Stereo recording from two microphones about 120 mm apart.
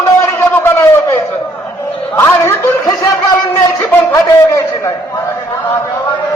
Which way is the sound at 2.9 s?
35° left (ahead or behind).